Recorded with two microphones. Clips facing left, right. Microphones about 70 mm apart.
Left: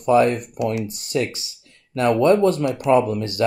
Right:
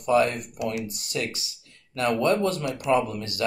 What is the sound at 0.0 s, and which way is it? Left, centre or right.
Speech, left.